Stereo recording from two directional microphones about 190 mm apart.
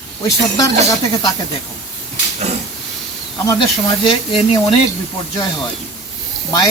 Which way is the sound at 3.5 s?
20° left (ahead or behind).